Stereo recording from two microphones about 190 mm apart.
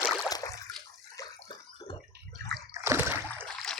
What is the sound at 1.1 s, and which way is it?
Bathtub, 25° left (ahead or behind).